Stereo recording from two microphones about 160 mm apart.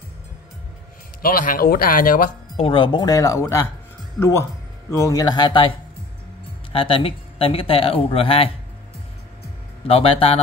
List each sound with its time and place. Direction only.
1.2 s speech: 60° left (ahead or behind)
2.5 s speech: 35° left (ahead or behind)
6.7 s speech: 35° left (ahead or behind)
9.8 s speech: 35° left (ahead or behind)